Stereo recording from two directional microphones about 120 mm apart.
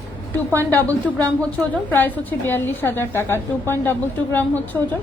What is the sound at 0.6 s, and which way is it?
A woman's voice, 15° left (ahead or behind).